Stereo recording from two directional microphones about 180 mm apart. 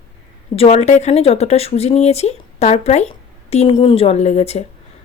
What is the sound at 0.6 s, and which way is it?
Speech, 40° left (ahead or behind).